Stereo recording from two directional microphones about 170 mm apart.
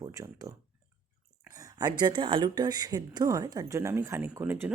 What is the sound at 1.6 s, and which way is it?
Speech, 25° right (ahead or behind).